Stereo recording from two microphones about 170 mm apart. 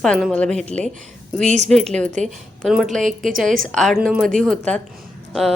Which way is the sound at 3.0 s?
50° right (ahead or behind).